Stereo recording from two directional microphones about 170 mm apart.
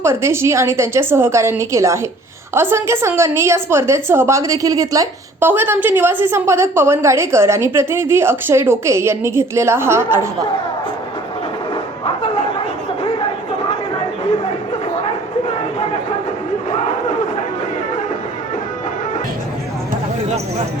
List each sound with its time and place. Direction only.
0.0 s a woman's voice: 15° right (ahead or behind)
12.0 s chatter: 30° left (ahead or behind)